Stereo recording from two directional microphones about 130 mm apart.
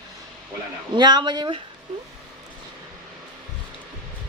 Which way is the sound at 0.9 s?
35° right (ahead or behind).